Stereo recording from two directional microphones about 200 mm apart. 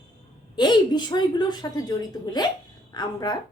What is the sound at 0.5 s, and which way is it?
A woman's voice, 20° left (ahead or behind).